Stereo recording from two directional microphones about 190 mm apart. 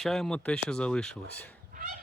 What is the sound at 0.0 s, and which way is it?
Speech, centre (ahead or behind).